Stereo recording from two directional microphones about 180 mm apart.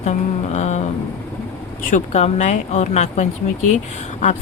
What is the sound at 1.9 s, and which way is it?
Speech, 40° left (ahead or behind).